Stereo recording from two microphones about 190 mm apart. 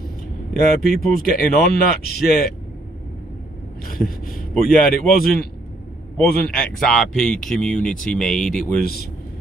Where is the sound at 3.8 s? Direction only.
50° left (ahead or behind).